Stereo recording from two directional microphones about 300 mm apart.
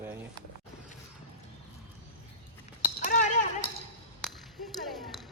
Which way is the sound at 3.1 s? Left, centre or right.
Left.